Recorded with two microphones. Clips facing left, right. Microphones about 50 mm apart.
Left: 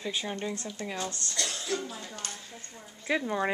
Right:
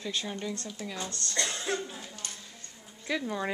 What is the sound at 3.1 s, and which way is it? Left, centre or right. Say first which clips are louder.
Speech: left 3 dB; centre.